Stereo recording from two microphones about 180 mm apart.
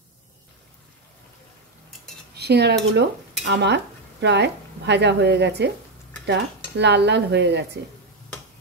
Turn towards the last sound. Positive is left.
turn(degrees=-70)  # may be behind; listen again after turning